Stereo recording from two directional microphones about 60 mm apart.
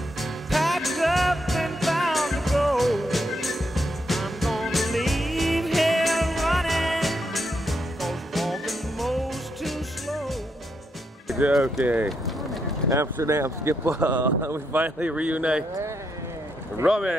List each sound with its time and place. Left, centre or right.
0.2 s music: centre
11.5 s speech: centre
11.8 s speech: right
12.1 s run: centre
12.9 s speech: right
14.0 s speech: right
16.8 s speech: centre